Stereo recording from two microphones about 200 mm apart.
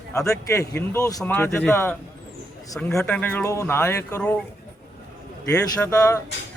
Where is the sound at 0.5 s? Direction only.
10° left (ahead or behind).